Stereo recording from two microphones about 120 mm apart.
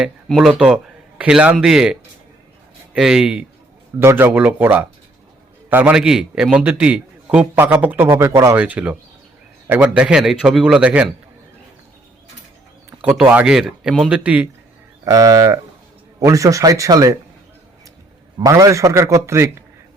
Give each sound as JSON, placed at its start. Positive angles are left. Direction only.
{"t": 0.3, "sound": "a man's voice", "side_deg": -5}
{"t": 4.0, "sound": "a man's voice", "side_deg": -15}
{"t": 13.0, "sound": "a man's voice", "side_deg": -10}
{"t": 15.0, "sound": "a man's voice", "side_deg": -25}
{"t": 18.3, "sound": "a man's voice", "side_deg": -25}